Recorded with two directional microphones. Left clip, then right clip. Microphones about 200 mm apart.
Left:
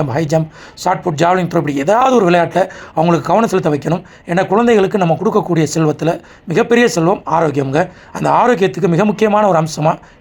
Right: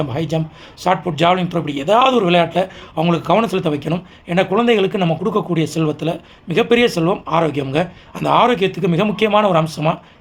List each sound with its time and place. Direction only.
0.9 s speech: 25° left (ahead or behind)
1.6 s speech: 10° left (ahead or behind)
1.9 s speech: 25° left (ahead or behind)